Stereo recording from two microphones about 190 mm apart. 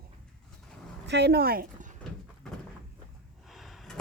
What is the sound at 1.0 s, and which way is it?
Speech, 60° right (ahead or behind).